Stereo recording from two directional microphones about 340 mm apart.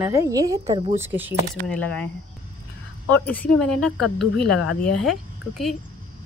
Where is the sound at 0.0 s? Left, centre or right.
Centre.